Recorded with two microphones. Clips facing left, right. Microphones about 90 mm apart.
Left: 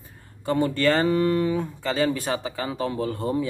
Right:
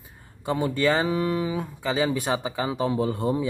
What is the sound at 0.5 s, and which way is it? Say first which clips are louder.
Speech: left 2 dB; 10° right (ahead or behind).